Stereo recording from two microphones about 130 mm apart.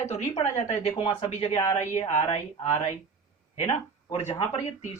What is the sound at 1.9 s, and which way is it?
Speech, 55° left (ahead or behind).